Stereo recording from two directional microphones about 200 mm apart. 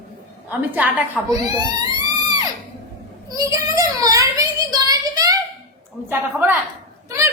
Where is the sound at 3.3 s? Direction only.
15° right (ahead or behind).